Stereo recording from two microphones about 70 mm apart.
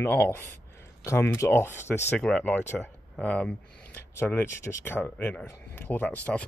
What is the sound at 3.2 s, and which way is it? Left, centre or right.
Speech, centre.